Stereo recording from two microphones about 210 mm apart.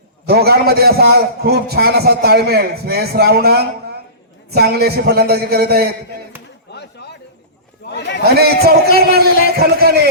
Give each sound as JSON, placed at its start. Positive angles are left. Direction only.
{"t": 0.3, "sound": "a man's voice", "side_deg": -50}
{"t": 6.7, "sound": "a sound", "side_deg": 55}
{"t": 8.4, "sound": "a man's voice", "side_deg": -50}